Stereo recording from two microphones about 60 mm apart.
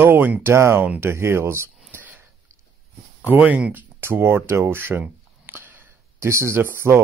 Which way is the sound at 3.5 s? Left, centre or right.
Right.